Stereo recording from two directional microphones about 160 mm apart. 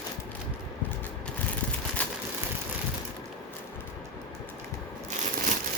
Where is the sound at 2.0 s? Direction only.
10° left (ahead or behind).